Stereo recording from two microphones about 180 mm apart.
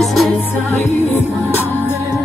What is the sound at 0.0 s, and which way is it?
Music, centre (ahead or behind).